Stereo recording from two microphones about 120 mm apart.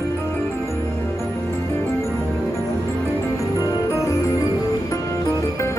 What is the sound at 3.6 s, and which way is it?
Music, 25° left (ahead or behind).